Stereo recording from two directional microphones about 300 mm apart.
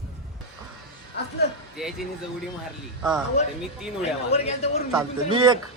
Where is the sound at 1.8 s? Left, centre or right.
Centre.